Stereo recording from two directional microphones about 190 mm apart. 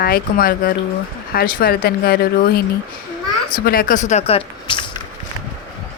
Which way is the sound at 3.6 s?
50° left (ahead or behind).